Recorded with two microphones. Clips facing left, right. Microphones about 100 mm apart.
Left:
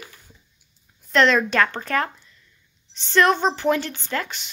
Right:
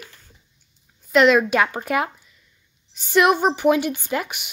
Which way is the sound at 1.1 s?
5° right (ahead or behind).